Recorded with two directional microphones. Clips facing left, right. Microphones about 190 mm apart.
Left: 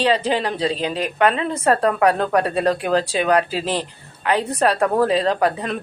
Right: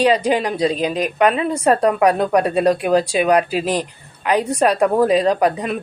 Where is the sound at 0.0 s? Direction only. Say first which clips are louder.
Right 3 dB; 15° right (ahead or behind).